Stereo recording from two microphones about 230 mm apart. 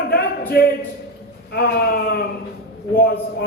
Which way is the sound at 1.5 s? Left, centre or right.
Left.